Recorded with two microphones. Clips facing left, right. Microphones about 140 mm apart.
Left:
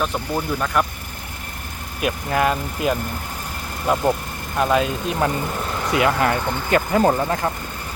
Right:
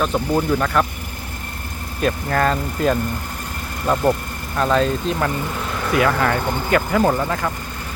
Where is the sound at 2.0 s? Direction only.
10° left (ahead or behind).